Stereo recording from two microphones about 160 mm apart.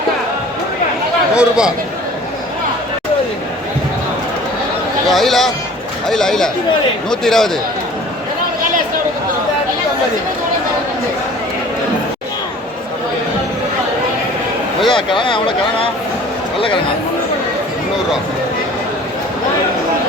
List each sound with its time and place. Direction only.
1.3 s speech: 5° right (ahead or behind)
5.0 s speech: centre (ahead or behind)
14.8 s speech: 30° left (ahead or behind)